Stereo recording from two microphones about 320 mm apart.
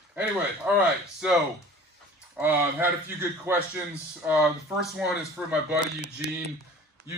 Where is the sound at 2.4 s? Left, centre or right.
Centre.